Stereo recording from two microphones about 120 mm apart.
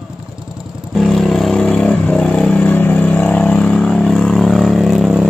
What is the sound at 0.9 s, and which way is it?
Vehicle, centre (ahead or behind).